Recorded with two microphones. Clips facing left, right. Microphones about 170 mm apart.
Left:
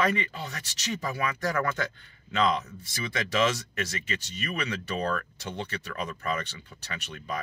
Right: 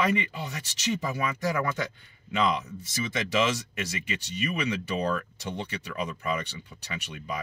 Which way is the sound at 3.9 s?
15° right (ahead or behind).